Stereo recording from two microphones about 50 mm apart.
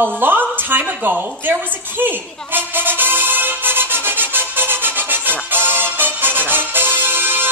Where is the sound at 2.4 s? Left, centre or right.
Right.